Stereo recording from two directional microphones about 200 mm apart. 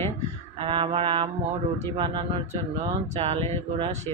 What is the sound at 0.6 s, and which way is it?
Speech, 25° right (ahead or behind).